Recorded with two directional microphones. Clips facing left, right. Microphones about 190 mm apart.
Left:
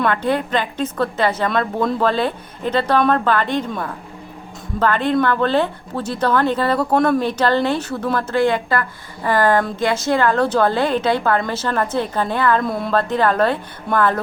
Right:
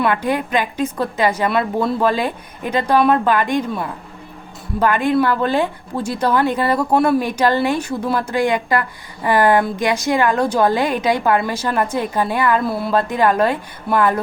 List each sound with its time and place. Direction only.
0.0 s a woman's voice: 10° right (ahead or behind)